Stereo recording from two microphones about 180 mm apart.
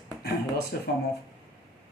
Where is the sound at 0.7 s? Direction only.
60° left (ahead or behind).